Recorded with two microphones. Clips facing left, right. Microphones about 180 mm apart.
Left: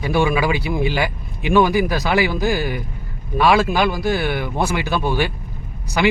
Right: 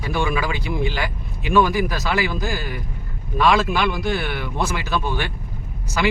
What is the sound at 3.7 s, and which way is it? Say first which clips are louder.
Speech: left 3 dB; 40° left (ahead or behind).